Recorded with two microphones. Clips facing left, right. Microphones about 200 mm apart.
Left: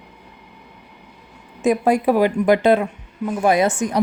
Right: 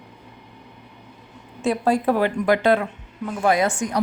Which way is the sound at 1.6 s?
15° left (ahead or behind).